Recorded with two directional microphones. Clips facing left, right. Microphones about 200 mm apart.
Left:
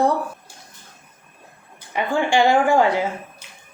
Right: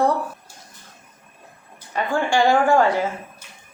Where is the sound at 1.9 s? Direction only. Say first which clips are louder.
Left 1 dB; 15° left (ahead or behind).